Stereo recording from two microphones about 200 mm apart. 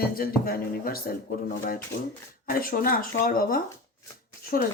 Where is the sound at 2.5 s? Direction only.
45° left (ahead or behind).